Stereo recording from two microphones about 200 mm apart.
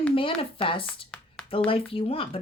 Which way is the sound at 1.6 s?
30° left (ahead or behind).